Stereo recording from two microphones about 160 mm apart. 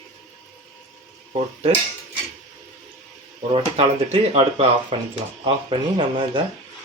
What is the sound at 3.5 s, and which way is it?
Speech, 35° right (ahead or behind).